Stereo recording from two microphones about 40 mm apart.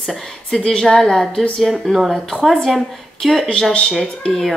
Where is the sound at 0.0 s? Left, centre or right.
Centre.